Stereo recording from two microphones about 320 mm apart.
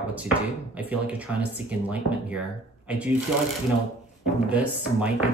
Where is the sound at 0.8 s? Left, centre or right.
Centre.